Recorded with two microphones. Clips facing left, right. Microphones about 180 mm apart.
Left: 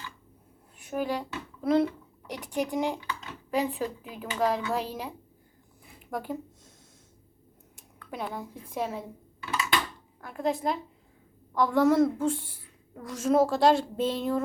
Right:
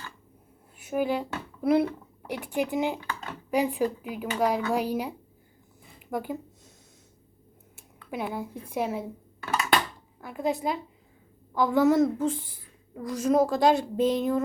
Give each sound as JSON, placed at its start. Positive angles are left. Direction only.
{"t": 0.8, "sound": "speech", "side_deg": -5}
{"t": 1.8, "sound": "a woman's voice", "side_deg": -55}
{"t": 2.6, "sound": "a woman's voice", "side_deg": -5}
{"t": 3.0, "sound": "a sound", "side_deg": -55}
{"t": 3.5, "sound": "speech", "side_deg": -15}
{"t": 6.1, "sound": "a sound", "side_deg": 0}
{"t": 7.8, "sound": "speech", "side_deg": -5}
{"t": 9.4, "sound": "dishes", "side_deg": -50}
{"t": 10.2, "sound": "a woman's voice", "side_deg": -5}